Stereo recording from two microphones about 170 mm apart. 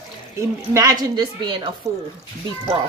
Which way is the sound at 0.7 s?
25° right (ahead or behind).